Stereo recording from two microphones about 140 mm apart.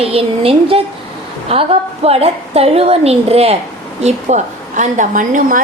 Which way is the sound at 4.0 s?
55° right (ahead or behind).